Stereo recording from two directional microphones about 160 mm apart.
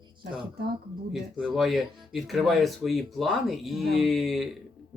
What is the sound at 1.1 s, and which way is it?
Speech, 5° right (ahead or behind).